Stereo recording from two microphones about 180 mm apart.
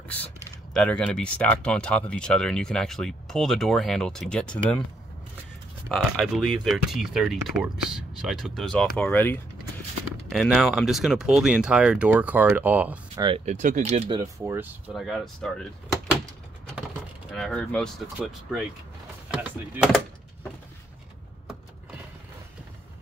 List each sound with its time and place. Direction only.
0.7 s speech: 5° left (ahead or behind)
5.9 s speech: centre (ahead or behind)
10.3 s speech: centre (ahead or behind)
13.1 s speech: 25° right (ahead or behind)
13.5 s speech: 45° right (ahead or behind)
14.1 s speech: 15° right (ahead or behind)
15.0 s speech: centre (ahead or behind)
17.3 s speech: 5° left (ahead or behind)